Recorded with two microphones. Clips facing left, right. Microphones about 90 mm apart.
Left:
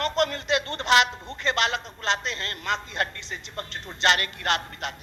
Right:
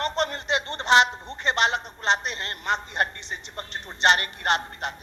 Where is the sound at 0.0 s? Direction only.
20° right (ahead or behind).